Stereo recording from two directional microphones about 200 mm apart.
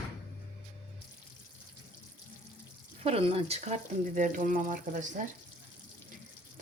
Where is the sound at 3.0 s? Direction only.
30° right (ahead or behind).